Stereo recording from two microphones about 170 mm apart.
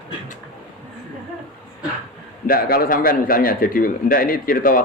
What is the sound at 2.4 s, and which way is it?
A man's voice, 60° left (ahead or behind).